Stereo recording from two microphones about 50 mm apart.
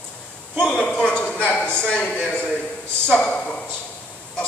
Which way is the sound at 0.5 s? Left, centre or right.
Centre.